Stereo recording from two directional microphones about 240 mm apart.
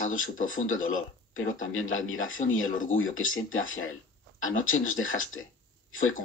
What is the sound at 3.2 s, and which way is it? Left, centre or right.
Speech, left.